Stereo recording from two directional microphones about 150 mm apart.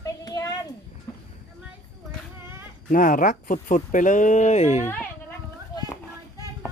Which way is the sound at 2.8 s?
65° left (ahead or behind).